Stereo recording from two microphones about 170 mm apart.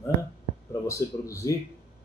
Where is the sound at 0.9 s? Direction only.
20° left (ahead or behind).